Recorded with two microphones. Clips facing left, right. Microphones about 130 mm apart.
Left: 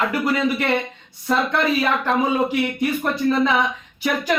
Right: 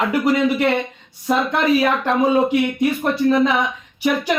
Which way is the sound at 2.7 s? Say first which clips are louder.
Right 3 dB; 15° right (ahead or behind).